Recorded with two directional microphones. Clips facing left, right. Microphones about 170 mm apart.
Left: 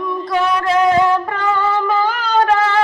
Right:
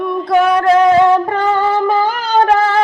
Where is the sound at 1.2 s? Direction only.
40° right (ahead or behind).